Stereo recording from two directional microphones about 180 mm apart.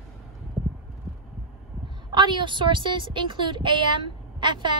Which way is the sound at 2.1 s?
25° right (ahead or behind).